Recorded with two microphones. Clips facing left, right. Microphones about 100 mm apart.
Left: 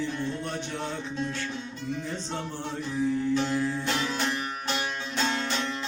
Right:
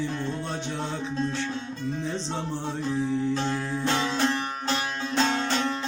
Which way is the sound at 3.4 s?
25° right (ahead or behind).